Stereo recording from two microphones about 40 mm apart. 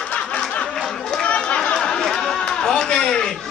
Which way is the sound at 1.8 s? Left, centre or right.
Centre.